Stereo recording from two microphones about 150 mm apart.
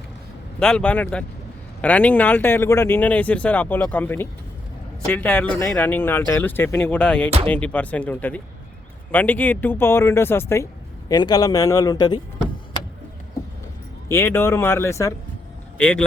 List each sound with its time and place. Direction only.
0.6 s a man's voice: 5° left (ahead or behind); by 12.2 s 25° left (ahead or behind)
14.1 s speech: 15° left (ahead or behind)
15.8 s speech: 5° left (ahead or behind)